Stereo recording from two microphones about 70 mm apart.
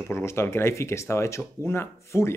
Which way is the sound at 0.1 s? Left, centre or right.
Left.